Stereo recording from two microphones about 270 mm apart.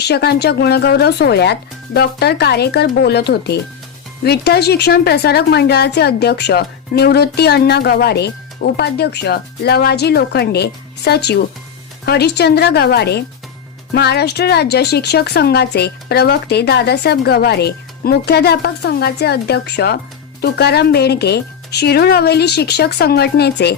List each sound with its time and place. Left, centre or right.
0.0 s a woman's voice: left